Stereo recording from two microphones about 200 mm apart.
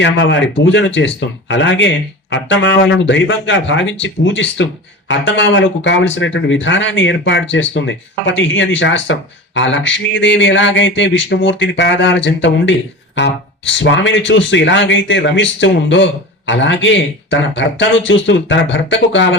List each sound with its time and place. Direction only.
0.0 s speech: 65° left (ahead or behind)